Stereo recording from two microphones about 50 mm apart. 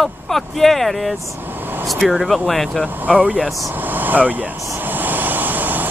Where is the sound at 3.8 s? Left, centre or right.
Right.